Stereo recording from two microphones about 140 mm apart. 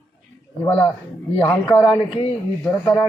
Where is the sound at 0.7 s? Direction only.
10° left (ahead or behind).